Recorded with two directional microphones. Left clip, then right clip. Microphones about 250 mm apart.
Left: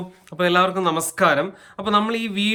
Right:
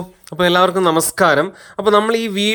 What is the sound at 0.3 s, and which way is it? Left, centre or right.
Speech, centre.